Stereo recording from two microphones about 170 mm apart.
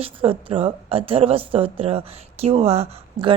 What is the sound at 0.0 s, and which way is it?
A woman's voice, 30° right (ahead or behind).